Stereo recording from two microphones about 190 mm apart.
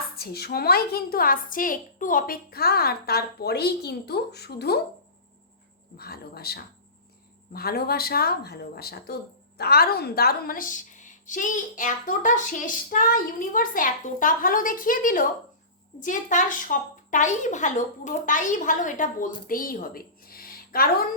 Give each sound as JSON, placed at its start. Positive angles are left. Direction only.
{"t": 0.2, "sound": "a woman's voice", "side_deg": 55}
{"t": 6.0, "sound": "a woman's voice", "side_deg": 55}